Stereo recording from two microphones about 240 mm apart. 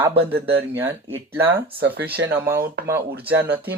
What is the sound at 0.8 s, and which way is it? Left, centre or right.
Speech, centre.